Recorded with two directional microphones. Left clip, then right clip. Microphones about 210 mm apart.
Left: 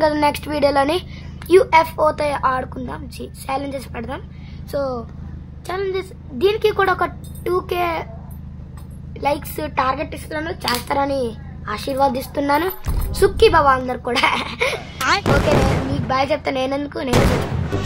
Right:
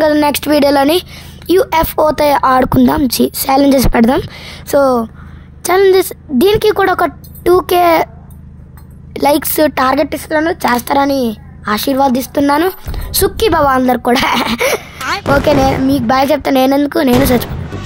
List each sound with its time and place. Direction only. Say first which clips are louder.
0.0 s a woman's voice: right 6 dB; 30° right (ahead or behind); by 8.1 s 45° right (ahead or behind)
9.1 s a woman's voice: right 10 dB; 50° right (ahead or behind); by 12.7 s 30° right (ahead or behind)
13.1 s a woman's voice: right 1 dB; 45° right (ahead or behind)
14.8 s speech: even; centre (ahead or behind)
16.1 s speech: right 7 dB; 40° right (ahead or behind)
17.1 s speech: right 7 dB; centre (ahead or behind)